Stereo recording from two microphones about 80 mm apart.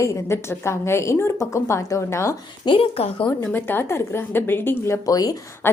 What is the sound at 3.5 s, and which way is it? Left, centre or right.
A woman's voice, left.